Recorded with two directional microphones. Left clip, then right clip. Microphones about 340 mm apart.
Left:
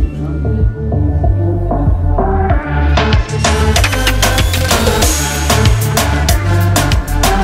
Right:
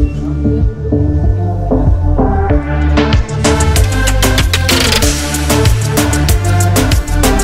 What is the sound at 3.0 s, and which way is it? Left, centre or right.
Music, centre.